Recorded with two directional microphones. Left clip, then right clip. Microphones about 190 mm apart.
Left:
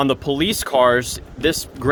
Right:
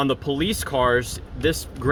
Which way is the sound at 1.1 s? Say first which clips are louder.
Left 3 dB; 55° left (ahead or behind).